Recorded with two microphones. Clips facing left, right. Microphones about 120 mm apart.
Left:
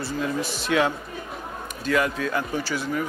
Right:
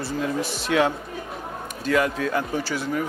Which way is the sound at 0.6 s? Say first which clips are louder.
Right 1 dB; 45° right (ahead or behind).